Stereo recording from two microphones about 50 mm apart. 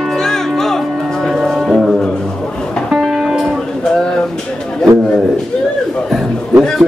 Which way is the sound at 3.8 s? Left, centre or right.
Centre.